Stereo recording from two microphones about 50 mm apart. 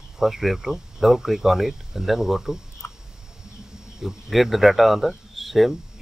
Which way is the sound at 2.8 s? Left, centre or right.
Left.